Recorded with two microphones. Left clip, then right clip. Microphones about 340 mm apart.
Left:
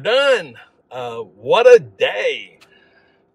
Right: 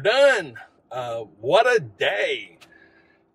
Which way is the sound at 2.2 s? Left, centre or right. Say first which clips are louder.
Left 4 dB; centre.